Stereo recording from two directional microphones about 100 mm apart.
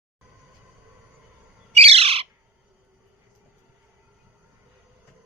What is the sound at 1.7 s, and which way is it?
Bird, 80° right.